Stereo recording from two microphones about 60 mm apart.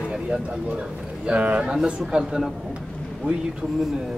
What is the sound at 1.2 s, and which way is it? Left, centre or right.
A man's voice, right.